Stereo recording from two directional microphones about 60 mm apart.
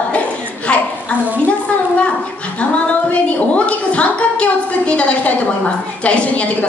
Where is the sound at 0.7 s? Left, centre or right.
Centre.